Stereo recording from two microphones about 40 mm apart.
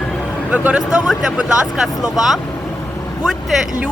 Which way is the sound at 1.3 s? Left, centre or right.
Right.